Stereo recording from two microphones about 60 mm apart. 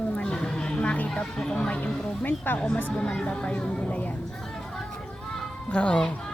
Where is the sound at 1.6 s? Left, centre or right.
Left.